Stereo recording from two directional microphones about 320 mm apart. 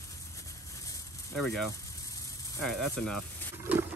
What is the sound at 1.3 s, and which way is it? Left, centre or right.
Speech, centre.